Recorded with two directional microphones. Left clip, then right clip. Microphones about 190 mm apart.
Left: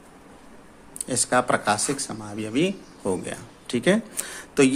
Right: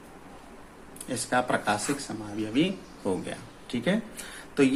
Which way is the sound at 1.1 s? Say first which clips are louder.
Left 5 dB; 50° left (ahead or behind).